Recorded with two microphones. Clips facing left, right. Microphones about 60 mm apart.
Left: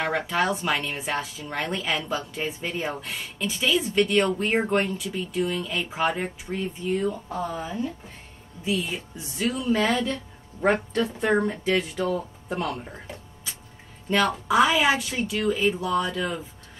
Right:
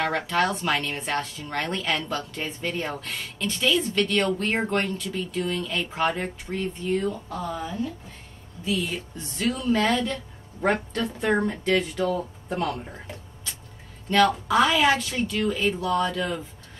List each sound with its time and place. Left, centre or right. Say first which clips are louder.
0.0 s speech: right 1 dB; centre
7.2 s speech: left 1 dB; left
8.7 s speech: right 2 dB; centre